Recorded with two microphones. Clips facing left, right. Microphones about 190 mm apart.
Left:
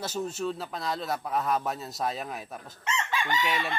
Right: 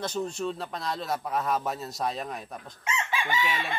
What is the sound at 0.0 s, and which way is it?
Chicken, 5° left (ahead or behind).